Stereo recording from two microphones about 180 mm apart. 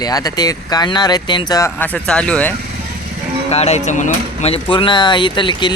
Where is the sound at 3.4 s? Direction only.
35° left (ahead or behind).